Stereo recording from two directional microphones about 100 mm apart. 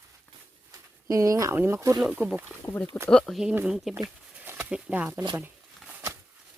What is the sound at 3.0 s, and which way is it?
Speech, 5° left (ahead or behind).